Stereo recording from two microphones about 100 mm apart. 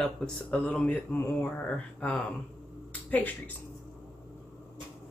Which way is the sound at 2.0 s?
15° left (ahead or behind).